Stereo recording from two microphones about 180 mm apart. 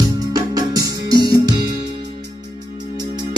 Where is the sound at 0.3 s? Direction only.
20° right (ahead or behind).